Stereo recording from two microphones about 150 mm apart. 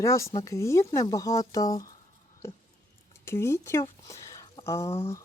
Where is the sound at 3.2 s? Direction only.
15° left (ahead or behind).